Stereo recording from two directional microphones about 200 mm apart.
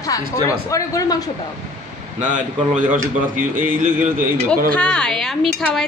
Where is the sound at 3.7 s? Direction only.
40° right (ahead or behind).